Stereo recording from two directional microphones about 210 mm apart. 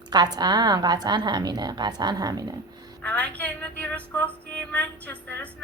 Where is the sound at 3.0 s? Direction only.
5° left (ahead or behind).